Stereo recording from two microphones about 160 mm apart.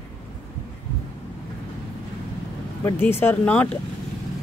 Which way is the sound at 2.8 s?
15° left (ahead or behind).